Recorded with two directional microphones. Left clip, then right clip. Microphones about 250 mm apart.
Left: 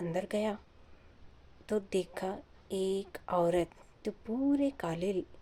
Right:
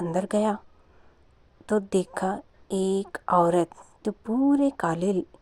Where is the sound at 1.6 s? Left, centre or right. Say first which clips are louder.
Right 8 dB; right.